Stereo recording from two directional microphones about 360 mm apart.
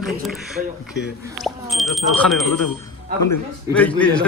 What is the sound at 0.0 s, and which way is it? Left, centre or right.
Speech, centre.